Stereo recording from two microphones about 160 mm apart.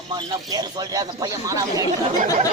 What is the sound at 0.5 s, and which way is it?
Speech, 25° right (ahead or behind).